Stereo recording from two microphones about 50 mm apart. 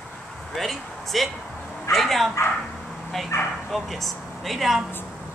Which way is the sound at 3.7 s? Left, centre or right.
Centre.